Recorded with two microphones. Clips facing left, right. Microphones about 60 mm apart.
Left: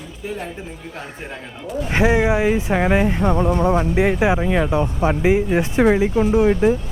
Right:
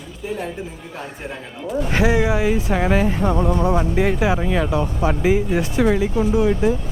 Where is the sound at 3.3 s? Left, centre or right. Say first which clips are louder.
Left 1 dB; left.